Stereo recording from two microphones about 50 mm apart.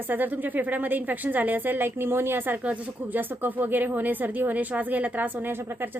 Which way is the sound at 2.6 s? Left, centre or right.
Right.